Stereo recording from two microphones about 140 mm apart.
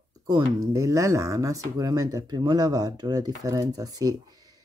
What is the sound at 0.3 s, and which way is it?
Speech, 25° right (ahead or behind).